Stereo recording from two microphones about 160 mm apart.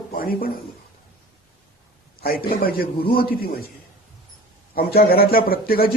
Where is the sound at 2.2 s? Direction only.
70° left (ahead or behind).